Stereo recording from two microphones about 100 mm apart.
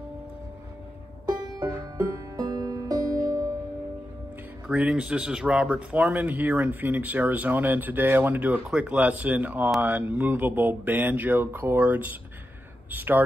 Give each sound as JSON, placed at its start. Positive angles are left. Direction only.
{"t": 2.0, "sound": "music", "side_deg": -40}
{"t": 4.6, "sound": "speech", "side_deg": -10}